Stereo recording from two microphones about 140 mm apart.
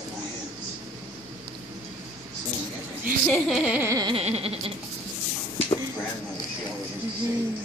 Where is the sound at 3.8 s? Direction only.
25° right (ahead or behind).